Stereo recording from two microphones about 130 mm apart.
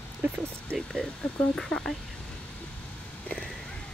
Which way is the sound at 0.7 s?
5° left (ahead or behind).